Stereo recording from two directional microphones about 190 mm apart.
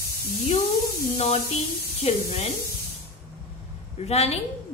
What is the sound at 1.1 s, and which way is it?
A woman's voice, 30° left (ahead or behind).